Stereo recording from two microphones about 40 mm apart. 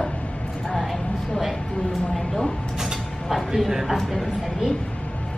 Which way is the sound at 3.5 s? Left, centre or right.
Centre.